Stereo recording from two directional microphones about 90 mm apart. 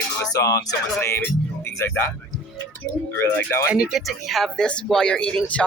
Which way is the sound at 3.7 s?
10° right (ahead or behind).